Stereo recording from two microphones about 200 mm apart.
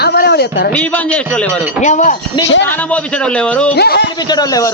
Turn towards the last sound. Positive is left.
turn(degrees=20)  # may be behind; listen again after turning